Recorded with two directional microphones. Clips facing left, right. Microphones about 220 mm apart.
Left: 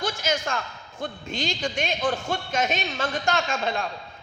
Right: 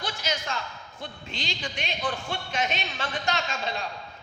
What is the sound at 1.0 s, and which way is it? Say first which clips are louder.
A man's voice: left 7 dB; 45° left (ahead or behind).